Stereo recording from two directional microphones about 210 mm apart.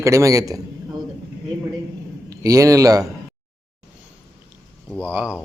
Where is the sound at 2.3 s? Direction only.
15° right (ahead or behind).